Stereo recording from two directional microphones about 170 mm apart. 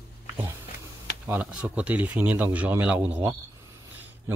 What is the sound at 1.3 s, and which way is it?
Speech, 5° right (ahead or behind).